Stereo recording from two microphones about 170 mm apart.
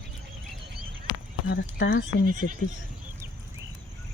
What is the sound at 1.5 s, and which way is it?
Speech, 80° left.